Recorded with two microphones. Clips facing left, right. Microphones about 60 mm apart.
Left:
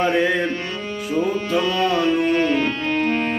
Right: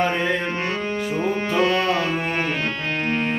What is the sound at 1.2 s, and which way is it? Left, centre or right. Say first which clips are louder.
Music: even; right.